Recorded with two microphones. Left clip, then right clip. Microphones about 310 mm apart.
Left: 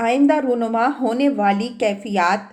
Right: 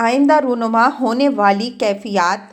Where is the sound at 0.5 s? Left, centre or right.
Right.